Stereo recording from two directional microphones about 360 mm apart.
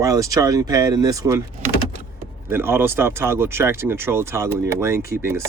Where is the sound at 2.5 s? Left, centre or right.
Centre.